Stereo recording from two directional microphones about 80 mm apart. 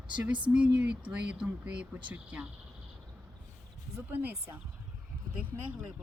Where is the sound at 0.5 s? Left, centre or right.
Centre.